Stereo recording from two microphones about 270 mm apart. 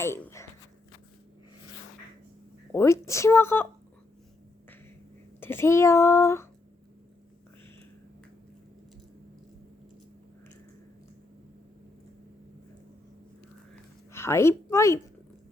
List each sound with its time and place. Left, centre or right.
0.0 s speech: centre
2.7 s speech: centre
5.4 s speech: centre
14.1 s a woman's voice: centre